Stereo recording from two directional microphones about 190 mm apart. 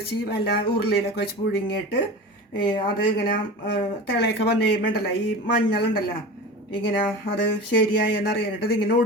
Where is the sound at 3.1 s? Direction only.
55° left (ahead or behind).